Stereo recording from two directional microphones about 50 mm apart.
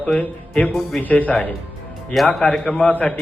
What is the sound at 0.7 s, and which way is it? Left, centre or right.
Speech, centre.